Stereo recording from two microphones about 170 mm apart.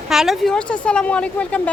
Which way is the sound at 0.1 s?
Centre (ahead or behind).